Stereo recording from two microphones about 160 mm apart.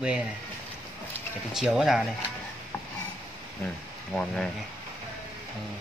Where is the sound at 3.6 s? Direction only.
5° left (ahead or behind).